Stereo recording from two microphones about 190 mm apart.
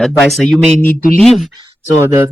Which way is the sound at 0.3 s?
5° left (ahead or behind).